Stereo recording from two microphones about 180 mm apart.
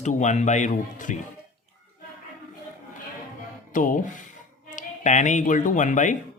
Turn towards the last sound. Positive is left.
turn(degrees=45)  # may be behind; listen again after turning